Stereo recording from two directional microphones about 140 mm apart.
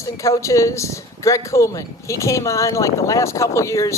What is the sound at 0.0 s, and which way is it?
A woman's voice, 20° left (ahead or behind).